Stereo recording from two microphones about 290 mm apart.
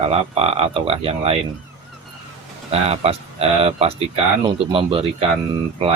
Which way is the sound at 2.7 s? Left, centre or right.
Right.